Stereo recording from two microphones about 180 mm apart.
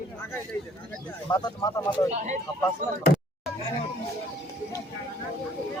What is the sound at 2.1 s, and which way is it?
Speech, 40° right (ahead or behind).